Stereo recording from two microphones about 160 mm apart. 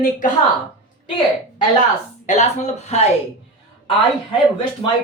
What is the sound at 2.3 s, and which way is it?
Speech, 45° left (ahead or behind).